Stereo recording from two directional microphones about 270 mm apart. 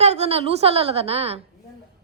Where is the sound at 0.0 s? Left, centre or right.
Right.